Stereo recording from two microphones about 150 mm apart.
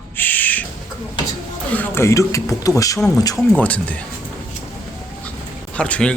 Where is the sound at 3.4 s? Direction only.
5° left (ahead or behind).